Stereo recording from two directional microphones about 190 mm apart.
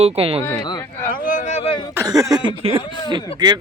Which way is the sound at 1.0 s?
45° left (ahead or behind).